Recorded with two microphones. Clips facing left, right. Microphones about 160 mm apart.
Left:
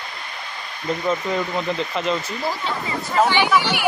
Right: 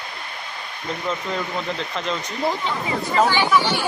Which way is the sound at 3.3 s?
15° left (ahead or behind).